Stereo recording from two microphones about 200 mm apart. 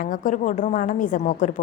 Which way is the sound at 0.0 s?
40° left (ahead or behind).